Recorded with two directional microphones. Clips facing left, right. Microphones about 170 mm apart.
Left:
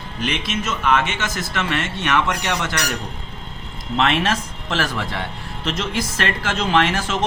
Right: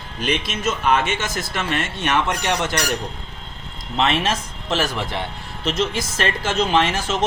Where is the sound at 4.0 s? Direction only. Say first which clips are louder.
Left 1 dB; 20° right (ahead or behind).